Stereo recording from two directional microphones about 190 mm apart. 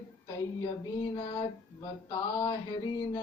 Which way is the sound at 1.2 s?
25° left (ahead or behind).